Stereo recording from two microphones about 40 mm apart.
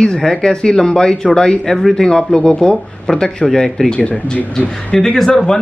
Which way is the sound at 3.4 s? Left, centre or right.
Centre.